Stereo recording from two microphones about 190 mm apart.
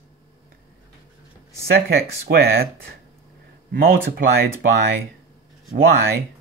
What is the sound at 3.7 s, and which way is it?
Speech, 50° right (ahead or behind).